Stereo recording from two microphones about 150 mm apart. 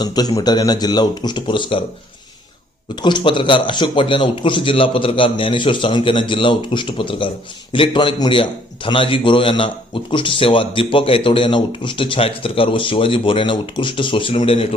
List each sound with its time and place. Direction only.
0.0 s speech: 25° left (ahead or behind)
2.9 s a man's voice: 30° left (ahead or behind)